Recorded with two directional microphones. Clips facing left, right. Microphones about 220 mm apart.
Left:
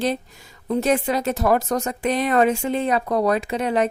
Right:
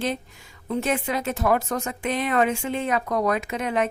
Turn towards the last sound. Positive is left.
turn(degrees=35)  # may be behind; listen again after turning